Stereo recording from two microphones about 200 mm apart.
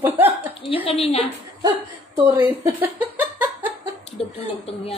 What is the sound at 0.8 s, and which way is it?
Speech, 30° left (ahead or behind).